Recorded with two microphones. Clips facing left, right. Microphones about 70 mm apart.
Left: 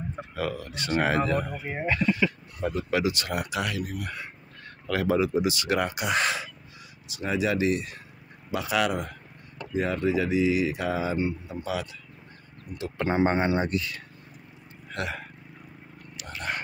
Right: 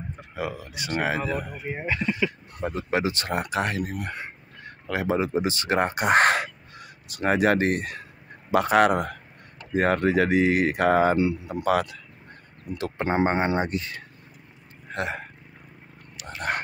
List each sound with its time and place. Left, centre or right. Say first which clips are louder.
0.4 s speech: even; centre
2.7 s speech: right 1 dB; right
4.6 s speech: even; right
11.1 s speech: right 5 dB; right
12.9 s speech: even; right
16.3 s a sound: right 4 dB; right